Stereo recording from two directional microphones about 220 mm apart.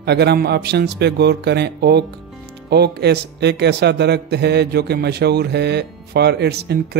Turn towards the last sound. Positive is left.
turn(degrees=-50)  # may be behind; listen again after turning